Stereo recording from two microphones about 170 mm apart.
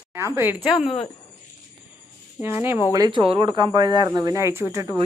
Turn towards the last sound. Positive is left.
turn(degrees=-15)  # may be behind; listen again after turning